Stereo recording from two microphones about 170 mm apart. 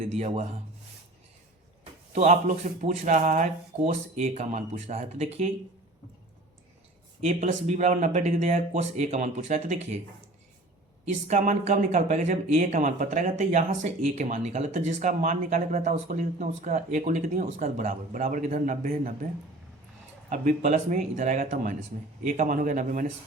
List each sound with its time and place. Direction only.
0.0 s speech: 40° right (ahead or behind)
1.8 s speech: 45° right (ahead or behind)
7.2 s speech: 40° right (ahead or behind)
11.0 s speech: 45° right (ahead or behind)
20.3 s speech: 50° right (ahead or behind)